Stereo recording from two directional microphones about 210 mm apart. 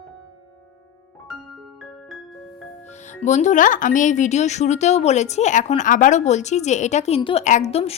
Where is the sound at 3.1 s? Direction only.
35° left (ahead or behind).